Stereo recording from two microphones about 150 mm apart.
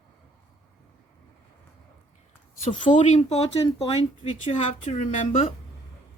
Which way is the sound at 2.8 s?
55° left (ahead or behind).